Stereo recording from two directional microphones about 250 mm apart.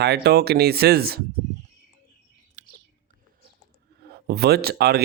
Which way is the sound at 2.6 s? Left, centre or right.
Right.